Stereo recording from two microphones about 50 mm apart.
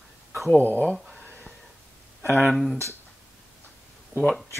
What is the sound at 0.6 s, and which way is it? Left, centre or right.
Speech, left.